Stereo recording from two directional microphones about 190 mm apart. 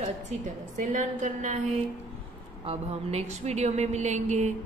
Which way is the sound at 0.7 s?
40° right (ahead or behind).